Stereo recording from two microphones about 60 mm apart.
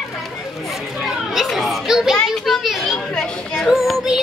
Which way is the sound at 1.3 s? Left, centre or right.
Centre.